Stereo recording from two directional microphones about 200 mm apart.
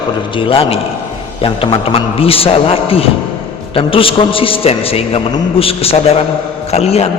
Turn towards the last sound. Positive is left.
turn(degrees=30)  # may be behind; listen again after turning